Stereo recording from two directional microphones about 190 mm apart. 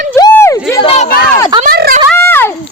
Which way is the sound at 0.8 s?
30° left (ahead or behind).